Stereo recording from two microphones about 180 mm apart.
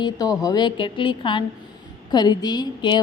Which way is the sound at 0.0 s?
20° left (ahead or behind).